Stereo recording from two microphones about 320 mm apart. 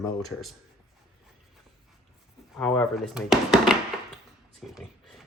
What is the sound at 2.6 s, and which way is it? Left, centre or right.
Speech, centre.